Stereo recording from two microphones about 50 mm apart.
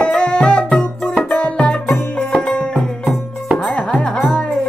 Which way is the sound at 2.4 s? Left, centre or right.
Centre.